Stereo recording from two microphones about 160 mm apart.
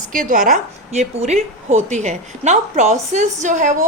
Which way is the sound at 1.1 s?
40° right (ahead or behind).